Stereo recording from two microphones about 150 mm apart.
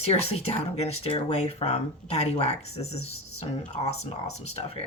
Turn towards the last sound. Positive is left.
turn(degrees=45)  # may be behind; listen again after turning